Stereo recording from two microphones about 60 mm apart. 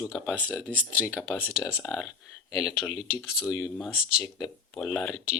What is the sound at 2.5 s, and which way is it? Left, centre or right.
Speech, centre.